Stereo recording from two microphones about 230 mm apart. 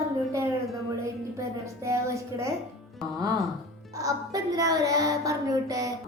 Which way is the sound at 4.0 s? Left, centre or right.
Centre.